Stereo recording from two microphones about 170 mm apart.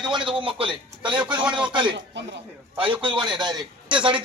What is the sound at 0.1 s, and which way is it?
Speech, 30° right (ahead or behind).